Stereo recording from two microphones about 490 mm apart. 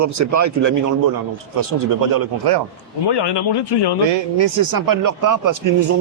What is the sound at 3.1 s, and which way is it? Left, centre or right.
Speech, left.